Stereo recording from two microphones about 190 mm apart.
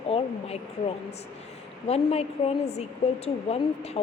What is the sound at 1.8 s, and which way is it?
A woman's voice, 35° left (ahead or behind).